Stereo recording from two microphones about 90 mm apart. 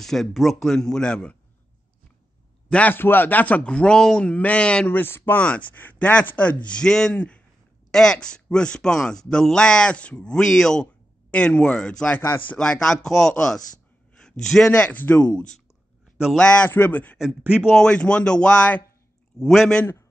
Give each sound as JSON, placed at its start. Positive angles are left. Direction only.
{"t": 0.0, "sound": "speech", "side_deg": 5}
{"t": 2.7, "sound": "speech", "side_deg": 20}
{"t": 12.2, "sound": "a man's voice", "side_deg": 20}
{"t": 12.5, "sound": "speech", "side_deg": 10}
{"t": 14.1, "sound": "a sound", "side_deg": 5}
{"t": 14.7, "sound": "speech", "side_deg": 15}
{"t": 19.3, "sound": "speech", "side_deg": 5}